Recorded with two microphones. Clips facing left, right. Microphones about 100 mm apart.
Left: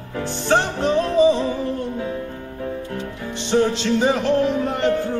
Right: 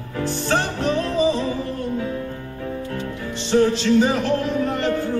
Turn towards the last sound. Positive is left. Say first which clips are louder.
# left 1 dB
turn(degrees=20)  # may be behind; listen again after turning